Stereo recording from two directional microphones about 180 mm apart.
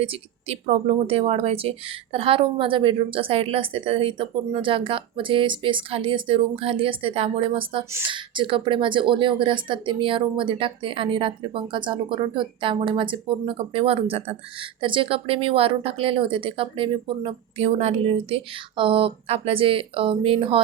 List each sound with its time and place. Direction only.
0.0 s a woman's voice: 30° right (ahead or behind)